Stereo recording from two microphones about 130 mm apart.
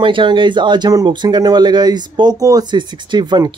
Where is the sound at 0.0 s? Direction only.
40° right (ahead or behind).